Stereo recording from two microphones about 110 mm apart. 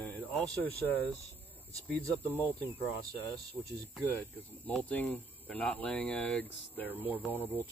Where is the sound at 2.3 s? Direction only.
15° left (ahead or behind).